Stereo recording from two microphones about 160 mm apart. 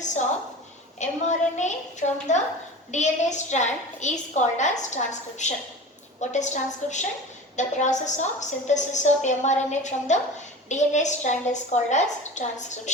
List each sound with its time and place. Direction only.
0.9 s a woman's voice: 50° left (ahead or behind)